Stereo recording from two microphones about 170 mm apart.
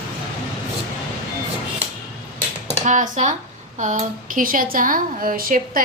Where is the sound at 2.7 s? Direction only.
45° right (ahead or behind).